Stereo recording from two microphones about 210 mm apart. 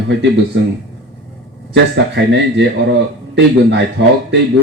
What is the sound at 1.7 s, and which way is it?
A man's voice, 55° right (ahead or behind).